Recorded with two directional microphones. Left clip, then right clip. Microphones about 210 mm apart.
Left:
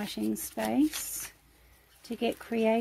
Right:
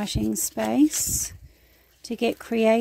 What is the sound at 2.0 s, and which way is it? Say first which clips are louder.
Speech: right 6 dB; 40° right (ahead or behind).